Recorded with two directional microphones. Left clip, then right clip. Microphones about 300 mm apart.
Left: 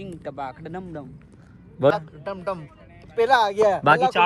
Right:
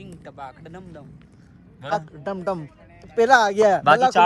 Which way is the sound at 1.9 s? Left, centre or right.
Right.